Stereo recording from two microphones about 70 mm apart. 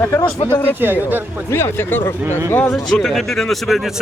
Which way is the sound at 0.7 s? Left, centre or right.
Right.